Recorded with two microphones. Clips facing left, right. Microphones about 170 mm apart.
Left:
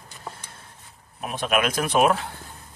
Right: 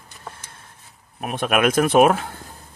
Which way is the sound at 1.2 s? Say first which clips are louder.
Right 4 dB; 55° right (ahead or behind).